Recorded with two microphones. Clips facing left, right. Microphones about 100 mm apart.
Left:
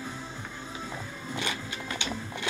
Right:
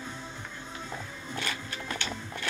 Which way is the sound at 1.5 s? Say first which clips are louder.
Left 1 dB; 15° left (ahead or behind).